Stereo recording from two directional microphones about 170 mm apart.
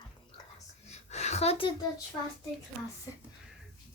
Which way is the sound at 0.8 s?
40° left (ahead or behind).